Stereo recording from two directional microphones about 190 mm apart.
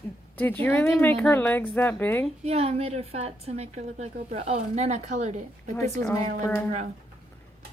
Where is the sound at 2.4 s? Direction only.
35° right (ahead or behind).